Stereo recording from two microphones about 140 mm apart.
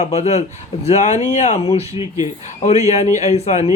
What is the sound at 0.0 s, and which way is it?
Speech, 50° left (ahead or behind).